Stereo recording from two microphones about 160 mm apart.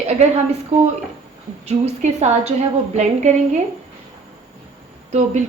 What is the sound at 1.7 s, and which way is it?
A woman's voice, 40° right (ahead or behind).